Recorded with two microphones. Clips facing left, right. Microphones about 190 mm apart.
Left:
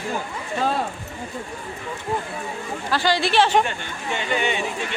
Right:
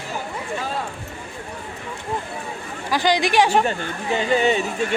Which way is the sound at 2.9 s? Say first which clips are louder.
Right 2 dB; 15° right (ahead or behind).